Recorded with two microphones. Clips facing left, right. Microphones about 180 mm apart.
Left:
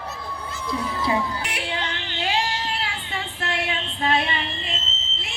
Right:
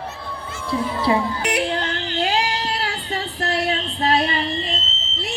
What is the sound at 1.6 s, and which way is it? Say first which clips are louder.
Female singing: right 5 dB; 40° right (ahead or behind).